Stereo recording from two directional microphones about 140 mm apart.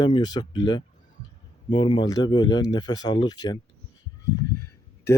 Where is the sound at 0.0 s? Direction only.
30° left (ahead or behind).